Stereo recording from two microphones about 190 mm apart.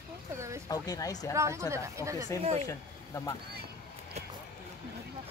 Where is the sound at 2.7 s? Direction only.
15° left (ahead or behind).